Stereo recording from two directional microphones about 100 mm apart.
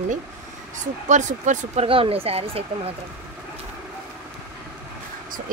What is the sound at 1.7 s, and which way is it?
Speech, 70° right (ahead or behind).